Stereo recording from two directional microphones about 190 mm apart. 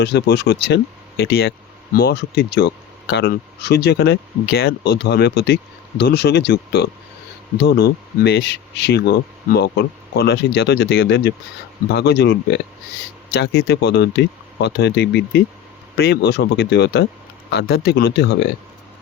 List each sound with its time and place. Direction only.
0.0 s speech: 60° left (ahead or behind)